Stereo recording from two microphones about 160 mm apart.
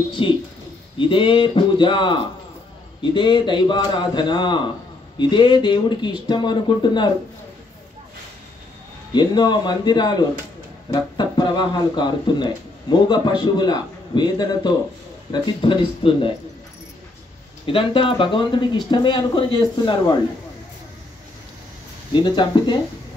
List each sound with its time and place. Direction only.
0.2 s speech: 30° left (ahead or behind)
9.1 s speech: 25° left (ahead or behind)
17.6 s speech: 35° left (ahead or behind)
22.1 s speech: 30° left (ahead or behind)